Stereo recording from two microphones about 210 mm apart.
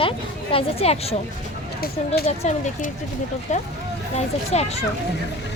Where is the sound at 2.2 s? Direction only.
30° left (ahead or behind).